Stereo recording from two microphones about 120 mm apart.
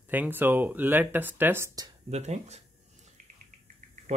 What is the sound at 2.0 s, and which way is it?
Speech, 65° right (ahead or behind).